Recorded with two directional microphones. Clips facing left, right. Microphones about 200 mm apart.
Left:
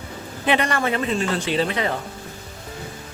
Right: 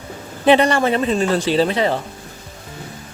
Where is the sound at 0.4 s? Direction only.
30° right (ahead or behind).